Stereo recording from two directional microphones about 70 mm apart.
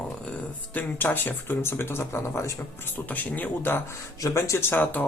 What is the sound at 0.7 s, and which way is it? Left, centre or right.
Speech, left.